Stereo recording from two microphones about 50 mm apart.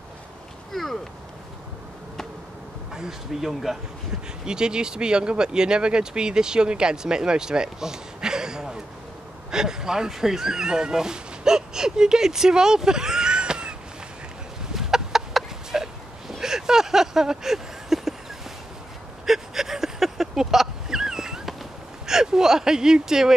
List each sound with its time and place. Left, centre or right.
0.7 s speech: centre
2.9 s speech: centre
14.7 s chicken: centre
19.2 s a sound: centre
22.0 s whimper: centre